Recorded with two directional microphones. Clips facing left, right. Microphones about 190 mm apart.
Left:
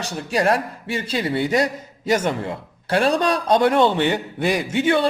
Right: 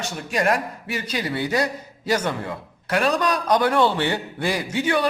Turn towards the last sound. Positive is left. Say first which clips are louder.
# left 3 dB
turn(degrees=25)  # may be behind; listen again after turning